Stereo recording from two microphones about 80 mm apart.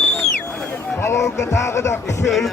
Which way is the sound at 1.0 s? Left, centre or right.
Left.